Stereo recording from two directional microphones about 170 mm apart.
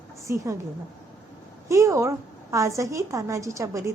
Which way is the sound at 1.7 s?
15° right (ahead or behind).